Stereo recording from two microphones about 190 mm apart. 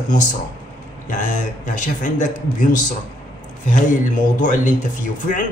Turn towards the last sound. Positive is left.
turn(degrees=40)  # may be behind; listen again after turning